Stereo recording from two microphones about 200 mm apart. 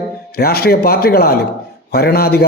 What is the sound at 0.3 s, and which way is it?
A man's voice, 50° left (ahead or behind).